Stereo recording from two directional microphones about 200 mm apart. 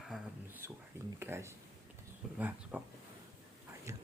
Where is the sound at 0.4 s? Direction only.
10° right (ahead or behind).